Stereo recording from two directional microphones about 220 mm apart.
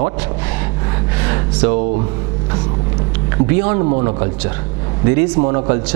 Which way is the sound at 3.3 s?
15° right (ahead or behind).